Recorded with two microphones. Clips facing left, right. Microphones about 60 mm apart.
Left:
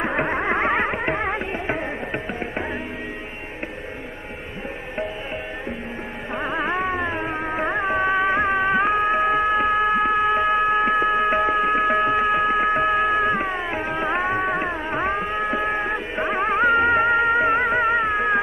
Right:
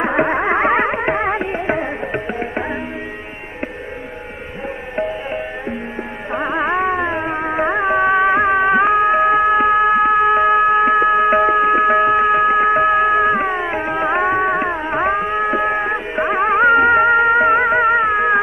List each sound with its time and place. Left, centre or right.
0.0 s music: centre
6.3 s music: right